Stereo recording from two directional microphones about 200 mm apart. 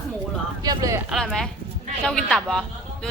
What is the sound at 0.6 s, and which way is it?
Speech, 15° right (ahead or behind).